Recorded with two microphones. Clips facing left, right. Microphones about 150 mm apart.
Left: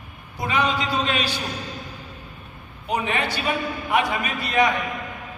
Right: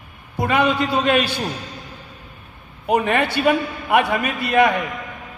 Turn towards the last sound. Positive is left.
turn(degrees=-55)  # may be behind; listen again after turning